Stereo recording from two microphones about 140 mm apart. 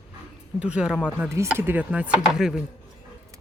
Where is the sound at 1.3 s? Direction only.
20° right (ahead or behind).